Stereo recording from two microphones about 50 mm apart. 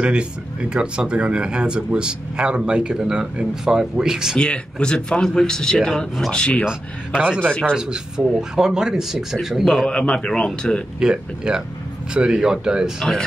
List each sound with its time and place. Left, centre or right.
0.0 s speech: right
4.4 s a man's voice: centre
6.3 s a man's voice: centre
6.6 s speech: centre
9.8 s a man's voice: centre
11.0 s speech: centre